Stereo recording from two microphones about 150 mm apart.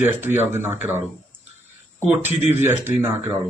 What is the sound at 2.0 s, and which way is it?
Speech, 15° right (ahead or behind).